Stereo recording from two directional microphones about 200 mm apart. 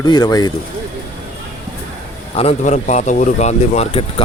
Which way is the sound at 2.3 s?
35° left (ahead or behind).